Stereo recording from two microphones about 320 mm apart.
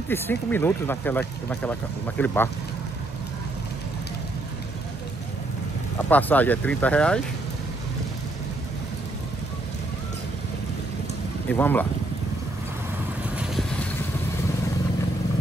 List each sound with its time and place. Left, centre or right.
0.1 s speech: centre
6.0 s speech: centre
11.4 s speech: centre
13.4 s boat: centre